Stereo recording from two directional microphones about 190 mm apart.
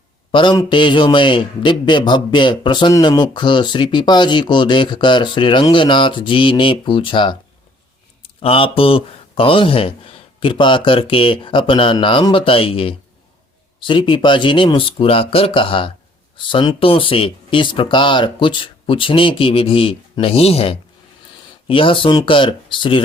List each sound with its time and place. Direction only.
0.3 s a man's voice: 25° left (ahead or behind)
8.4 s a man's voice: 30° left (ahead or behind)